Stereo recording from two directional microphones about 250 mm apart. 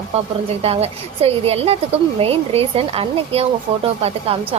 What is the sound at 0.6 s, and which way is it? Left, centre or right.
A woman's voice, right.